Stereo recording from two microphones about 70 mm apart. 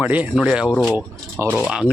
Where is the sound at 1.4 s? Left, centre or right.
Right.